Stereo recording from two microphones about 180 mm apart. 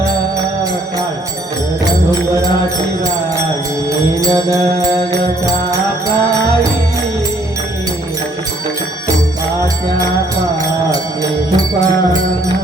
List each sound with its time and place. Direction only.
4.1 s music: 20° right (ahead or behind)
10.9 s music: 20° right (ahead or behind)